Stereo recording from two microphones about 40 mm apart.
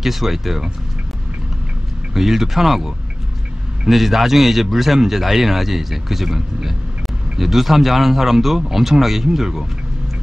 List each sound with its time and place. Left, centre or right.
0.0 s a man's voice: centre
2.1 s a man's voice: centre